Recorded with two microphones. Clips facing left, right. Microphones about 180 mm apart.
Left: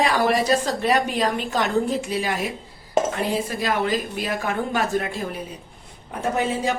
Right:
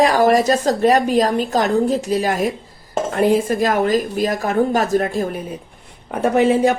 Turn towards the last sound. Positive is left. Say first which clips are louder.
# right 8 dB
turn(degrees=-60)  # may be behind; listen again after turning